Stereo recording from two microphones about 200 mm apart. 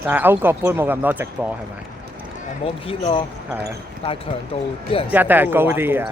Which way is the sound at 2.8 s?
25° left (ahead or behind).